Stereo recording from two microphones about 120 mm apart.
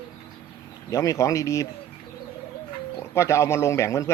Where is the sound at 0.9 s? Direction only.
25° left (ahead or behind).